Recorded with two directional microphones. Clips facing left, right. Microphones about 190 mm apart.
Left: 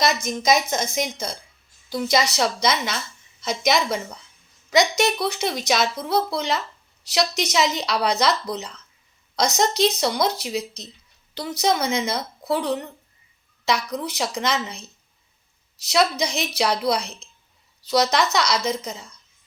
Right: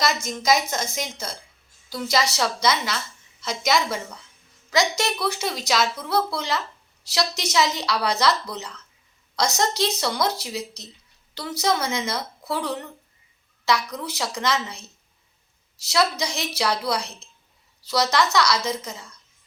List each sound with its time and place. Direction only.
0.0 s a woman's voice: 20° left (ahead or behind)